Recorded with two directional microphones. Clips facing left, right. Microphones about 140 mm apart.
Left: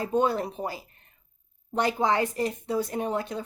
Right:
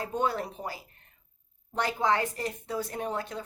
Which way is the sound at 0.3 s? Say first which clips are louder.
Left 4 dB; 25° left (ahead or behind).